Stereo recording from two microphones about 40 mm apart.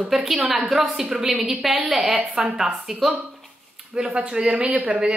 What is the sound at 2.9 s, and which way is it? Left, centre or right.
Speech, centre.